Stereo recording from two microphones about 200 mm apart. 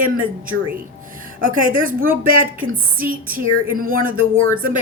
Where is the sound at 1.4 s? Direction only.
45° right (ahead or behind).